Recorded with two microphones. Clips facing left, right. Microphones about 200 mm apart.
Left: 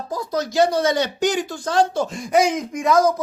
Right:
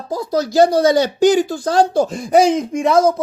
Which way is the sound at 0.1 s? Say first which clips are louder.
Right 6 dB; 30° right (ahead or behind).